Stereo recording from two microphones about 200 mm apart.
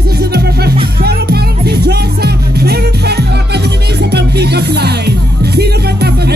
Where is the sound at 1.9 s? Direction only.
55° right (ahead or behind).